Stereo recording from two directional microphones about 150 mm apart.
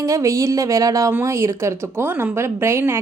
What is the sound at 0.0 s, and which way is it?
A woman's voice, 20° right (ahead or behind).